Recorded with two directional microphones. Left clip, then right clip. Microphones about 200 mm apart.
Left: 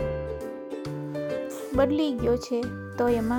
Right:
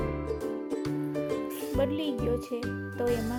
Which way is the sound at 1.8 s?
35° left (ahead or behind).